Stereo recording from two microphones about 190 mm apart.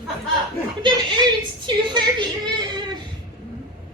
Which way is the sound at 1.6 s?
25° right (ahead or behind).